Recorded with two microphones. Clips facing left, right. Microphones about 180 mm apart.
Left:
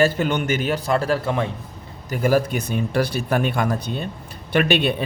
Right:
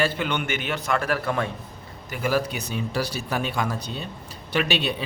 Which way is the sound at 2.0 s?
45° left (ahead or behind).